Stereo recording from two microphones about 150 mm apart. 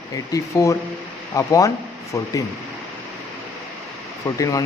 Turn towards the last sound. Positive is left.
turn(degrees=20)  # may be behind; listen again after turning